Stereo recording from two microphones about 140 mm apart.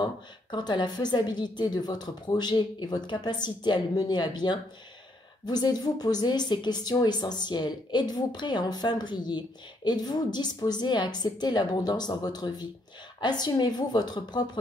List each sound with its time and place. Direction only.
0.0 s speech: 30° left (ahead or behind)